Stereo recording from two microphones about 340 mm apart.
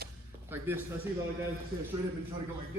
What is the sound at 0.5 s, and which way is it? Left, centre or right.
Speech, centre.